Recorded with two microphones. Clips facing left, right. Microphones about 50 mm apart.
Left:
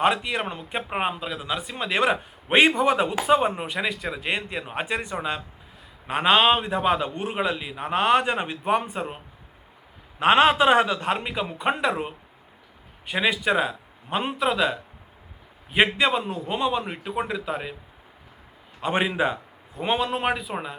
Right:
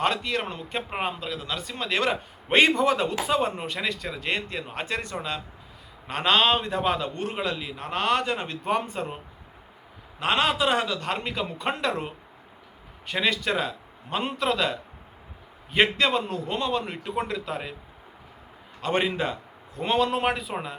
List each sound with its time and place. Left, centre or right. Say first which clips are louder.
0.0 s speech: left 3 dB; centre
10.2 s a man's voice: left 6 dB; left
11.2 s speech: left 2 dB; centre
18.8 s speech: left 2 dB; centre